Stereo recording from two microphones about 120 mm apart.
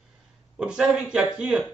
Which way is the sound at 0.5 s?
5° right (ahead or behind).